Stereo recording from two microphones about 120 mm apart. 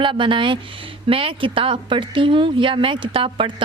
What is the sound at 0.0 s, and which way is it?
Speech, 45° right (ahead or behind).